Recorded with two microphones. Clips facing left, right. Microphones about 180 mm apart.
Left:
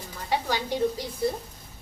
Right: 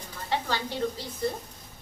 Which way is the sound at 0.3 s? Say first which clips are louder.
Left 3 dB; 15° left (ahead or behind).